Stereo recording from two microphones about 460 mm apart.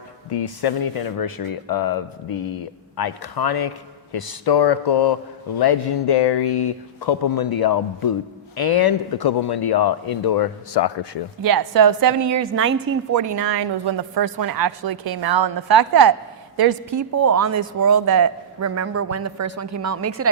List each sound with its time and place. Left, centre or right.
0.3 s speech: left
11.4 s speech: right
13.1 s speech: right
17.2 s a man's voice: right